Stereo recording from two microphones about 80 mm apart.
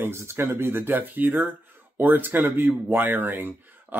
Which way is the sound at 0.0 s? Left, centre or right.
Right.